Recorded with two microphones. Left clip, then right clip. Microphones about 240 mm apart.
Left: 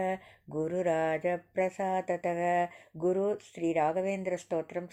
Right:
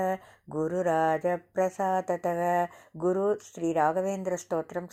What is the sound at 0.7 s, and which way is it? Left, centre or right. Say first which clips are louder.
Speech: right 4 dB; centre.